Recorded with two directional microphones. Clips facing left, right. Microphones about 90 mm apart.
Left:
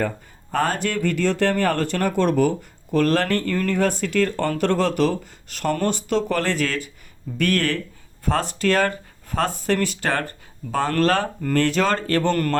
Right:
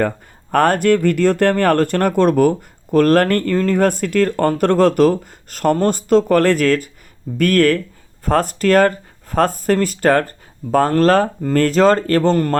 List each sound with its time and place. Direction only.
0.5 s speech: 55° right (ahead or behind)
3.5 s speech: 30° right (ahead or behind)
3.8 s speech: 50° right (ahead or behind)
12.3 s a man's voice: 25° right (ahead or behind)